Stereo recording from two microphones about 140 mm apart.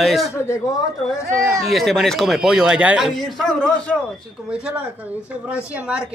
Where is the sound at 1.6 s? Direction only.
Centre (ahead or behind).